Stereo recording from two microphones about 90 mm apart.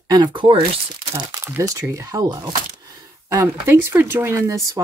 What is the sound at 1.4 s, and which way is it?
Speech, 30° right (ahead or behind).